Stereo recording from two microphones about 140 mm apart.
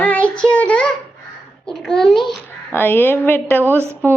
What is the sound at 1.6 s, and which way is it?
A child's voice, 5° left (ahead or behind).